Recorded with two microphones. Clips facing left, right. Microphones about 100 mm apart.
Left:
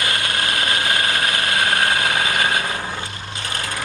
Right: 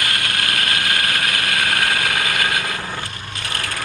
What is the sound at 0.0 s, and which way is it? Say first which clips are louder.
Vehicle: left 1 dB; 25° left (ahead or behind).